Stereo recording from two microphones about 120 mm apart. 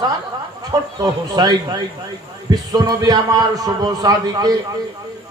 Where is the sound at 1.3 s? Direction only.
30° right (ahead or behind).